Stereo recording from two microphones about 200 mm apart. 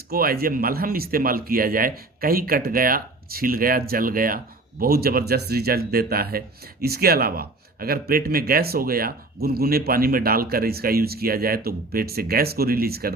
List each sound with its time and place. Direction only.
0.1 s a man's voice: 50° right (ahead or behind)